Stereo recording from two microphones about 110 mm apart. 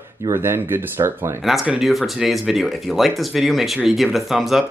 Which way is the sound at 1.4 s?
Centre (ahead or behind).